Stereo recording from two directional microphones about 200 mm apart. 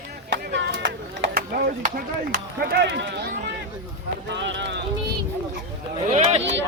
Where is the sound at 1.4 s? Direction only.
45° right (ahead or behind).